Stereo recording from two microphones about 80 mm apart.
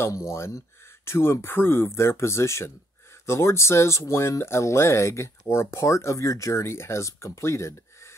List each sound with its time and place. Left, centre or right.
0.1 s speech: left